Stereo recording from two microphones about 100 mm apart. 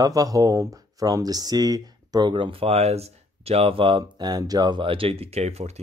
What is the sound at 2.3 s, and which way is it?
Speech, 60° right (ahead or behind).